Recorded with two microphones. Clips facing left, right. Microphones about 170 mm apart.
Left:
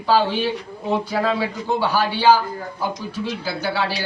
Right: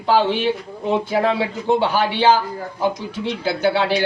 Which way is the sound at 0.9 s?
25° right (ahead or behind).